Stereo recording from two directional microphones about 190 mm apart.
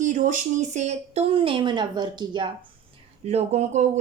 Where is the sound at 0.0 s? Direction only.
40° right (ahead or behind); by 2.5 s 25° right (ahead or behind).